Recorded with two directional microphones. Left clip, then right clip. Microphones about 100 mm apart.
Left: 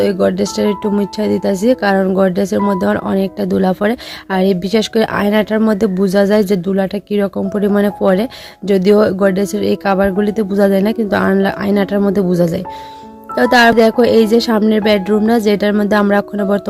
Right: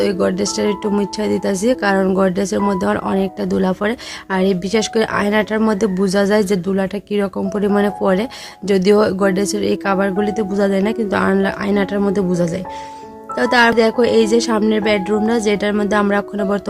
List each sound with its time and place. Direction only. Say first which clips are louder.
0.0 s speech: left 3 dB; 45° left (ahead or behind)